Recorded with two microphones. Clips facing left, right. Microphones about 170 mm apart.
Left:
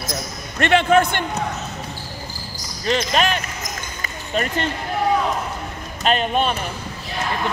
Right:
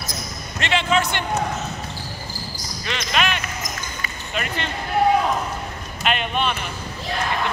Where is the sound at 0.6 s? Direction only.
55° left (ahead or behind).